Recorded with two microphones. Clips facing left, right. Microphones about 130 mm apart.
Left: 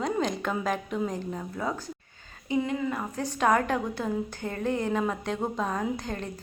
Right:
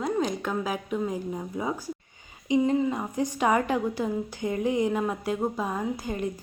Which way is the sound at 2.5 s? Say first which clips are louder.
Right 4 dB; 20° right (ahead or behind).